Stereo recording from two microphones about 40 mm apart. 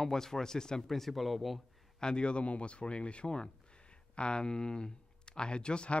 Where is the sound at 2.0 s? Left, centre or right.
Left.